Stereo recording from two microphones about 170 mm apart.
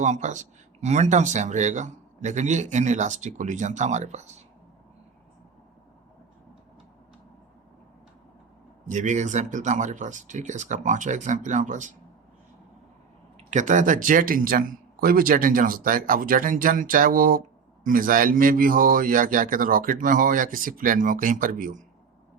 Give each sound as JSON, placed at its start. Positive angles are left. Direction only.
{"t": 0.0, "sound": "speech", "side_deg": -45}
{"t": 8.9, "sound": "speech", "side_deg": -45}
{"t": 13.5, "sound": "speech", "side_deg": -45}